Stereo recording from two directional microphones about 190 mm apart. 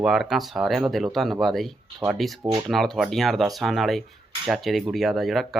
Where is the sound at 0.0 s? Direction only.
Centre (ahead or behind).